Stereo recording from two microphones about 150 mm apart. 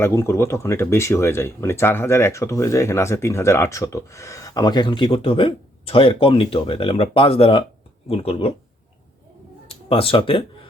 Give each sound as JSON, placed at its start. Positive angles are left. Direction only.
{"t": 0.0, "sound": "speech", "side_deg": 20}
{"t": 9.6, "sound": "speech", "side_deg": 40}